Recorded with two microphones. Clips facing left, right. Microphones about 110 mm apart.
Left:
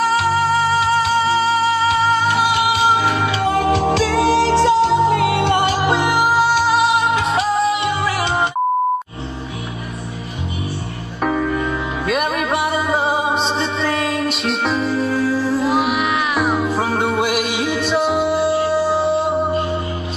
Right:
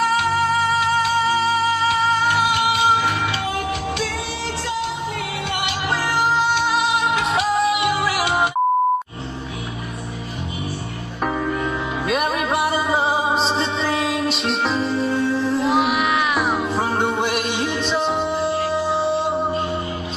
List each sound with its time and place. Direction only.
0.1 s music: centre (ahead or behind)
3.5 s music: 80° left
5.5 s music: 40° left (ahead or behind)
6.0 s music: 15° left (ahead or behind); by 8.5 s centre (ahead or behind)
11.2 s music: 5° right (ahead or behind)